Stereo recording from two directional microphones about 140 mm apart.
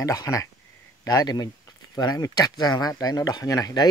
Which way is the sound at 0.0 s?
25° left (ahead or behind).